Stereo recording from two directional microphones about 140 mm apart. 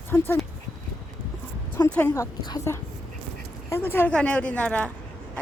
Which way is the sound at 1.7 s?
15° left (ahead or behind).